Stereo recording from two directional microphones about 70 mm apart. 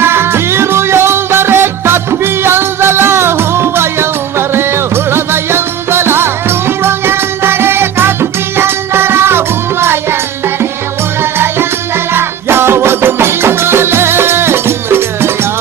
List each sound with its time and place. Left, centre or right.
0.0 s music: right